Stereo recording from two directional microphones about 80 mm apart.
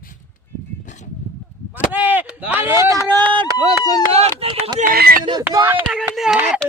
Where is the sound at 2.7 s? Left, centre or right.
Right.